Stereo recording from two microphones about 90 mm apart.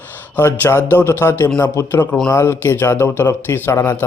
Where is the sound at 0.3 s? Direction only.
25° left (ahead or behind).